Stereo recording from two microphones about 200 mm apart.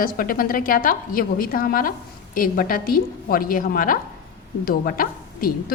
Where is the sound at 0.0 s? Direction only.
45° left (ahead or behind).